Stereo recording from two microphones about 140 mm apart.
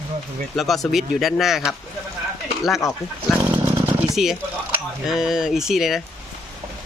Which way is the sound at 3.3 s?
Centre (ahead or behind).